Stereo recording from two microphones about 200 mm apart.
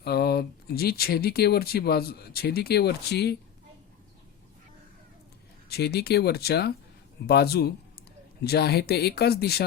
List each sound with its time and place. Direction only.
0.0 s speech: 50° left (ahead or behind)
5.6 s speech: 55° left (ahead or behind)